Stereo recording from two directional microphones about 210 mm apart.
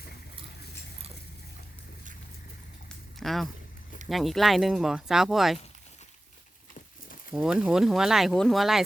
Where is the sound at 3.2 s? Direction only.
Centre (ahead or behind).